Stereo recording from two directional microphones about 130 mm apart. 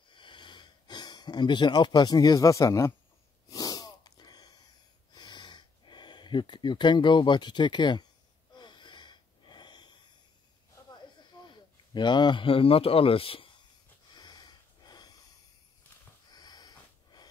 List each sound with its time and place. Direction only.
0.1 s a sound: 40° left (ahead or behind)
3.4 s sneeze: 25° left (ahead or behind)
5.1 s a sound: 35° left (ahead or behind)
8.5 s wheeze: 35° left (ahead or behind)
11.4 s speech: 35° left (ahead or behind)
14.1 s snort: 35° left (ahead or behind)
16.3 s snort: 35° left (ahead or behind)